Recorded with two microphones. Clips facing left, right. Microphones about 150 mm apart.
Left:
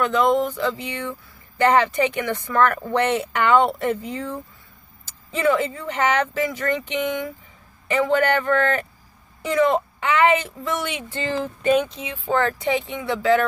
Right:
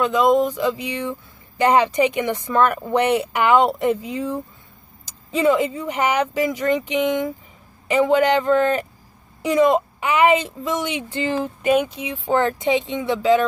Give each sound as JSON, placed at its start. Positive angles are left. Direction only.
{"t": 0.0, "sound": "a woman's voice", "side_deg": -15}